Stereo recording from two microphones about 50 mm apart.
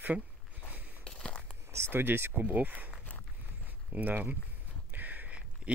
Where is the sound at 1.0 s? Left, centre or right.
Centre.